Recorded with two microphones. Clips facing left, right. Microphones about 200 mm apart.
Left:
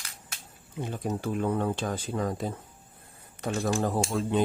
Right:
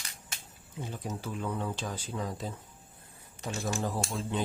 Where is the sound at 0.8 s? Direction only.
55° left (ahead or behind).